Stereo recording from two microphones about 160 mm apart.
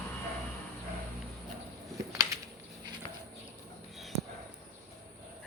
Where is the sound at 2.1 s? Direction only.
20° right (ahead or behind).